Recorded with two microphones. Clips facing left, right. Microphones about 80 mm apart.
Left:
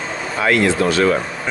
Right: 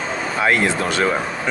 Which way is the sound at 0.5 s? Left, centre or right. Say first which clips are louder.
Left 3 dB; right.